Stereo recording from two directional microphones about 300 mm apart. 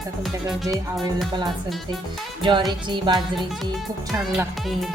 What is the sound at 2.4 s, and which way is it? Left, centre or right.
Speech, centre.